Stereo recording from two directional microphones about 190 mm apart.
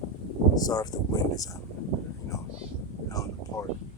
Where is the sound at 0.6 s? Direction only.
20° left (ahead or behind).